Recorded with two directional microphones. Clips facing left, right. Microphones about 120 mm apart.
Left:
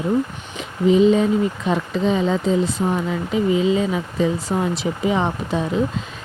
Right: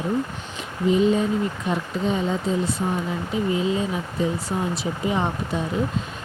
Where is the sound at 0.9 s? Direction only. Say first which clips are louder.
Left 5 dB; 90° left.